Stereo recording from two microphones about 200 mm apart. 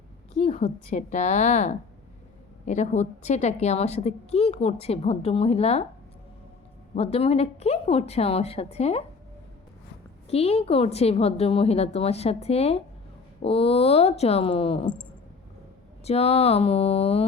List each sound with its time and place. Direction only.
0.3 s a woman's voice: 30° left (ahead or behind)
6.9 s a woman's voice: 30° left (ahead or behind)
10.2 s a woman's voice: 30° left (ahead or behind)
16.0 s a woman's voice: 30° left (ahead or behind)